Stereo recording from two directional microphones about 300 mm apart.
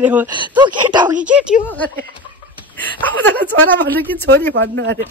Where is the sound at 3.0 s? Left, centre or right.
Centre.